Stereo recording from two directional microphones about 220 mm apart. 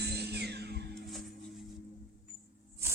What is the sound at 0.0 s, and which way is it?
Music, 50° right (ahead or behind).